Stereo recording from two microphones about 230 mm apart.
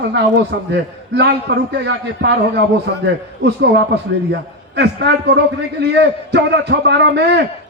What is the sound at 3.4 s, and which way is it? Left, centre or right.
A man's voice, right.